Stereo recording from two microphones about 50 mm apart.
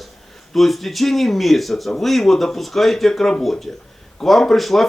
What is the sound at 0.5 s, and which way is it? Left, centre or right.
Speech, centre.